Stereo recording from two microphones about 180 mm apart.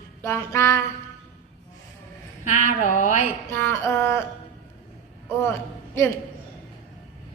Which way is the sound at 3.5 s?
15° left (ahead or behind).